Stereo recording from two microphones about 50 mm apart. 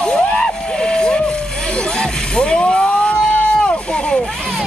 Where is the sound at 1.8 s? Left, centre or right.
Centre.